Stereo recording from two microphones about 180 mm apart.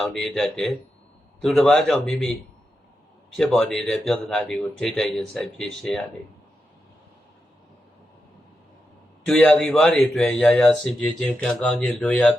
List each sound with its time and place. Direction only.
0.0 s speech: centre (ahead or behind)
3.3 s speech: centre (ahead or behind)
9.2 s speech: 5° left (ahead or behind)